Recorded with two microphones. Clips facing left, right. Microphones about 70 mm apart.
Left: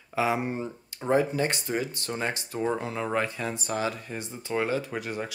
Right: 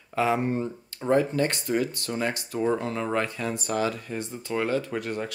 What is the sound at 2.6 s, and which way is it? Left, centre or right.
Speech, centre.